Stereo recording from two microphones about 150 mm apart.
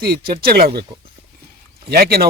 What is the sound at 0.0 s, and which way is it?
Speech, 85° right.